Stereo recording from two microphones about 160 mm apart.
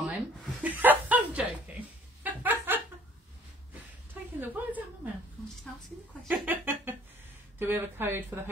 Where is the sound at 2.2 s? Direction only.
10° right (ahead or behind).